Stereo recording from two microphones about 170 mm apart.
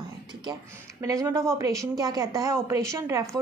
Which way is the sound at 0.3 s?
25° right (ahead or behind).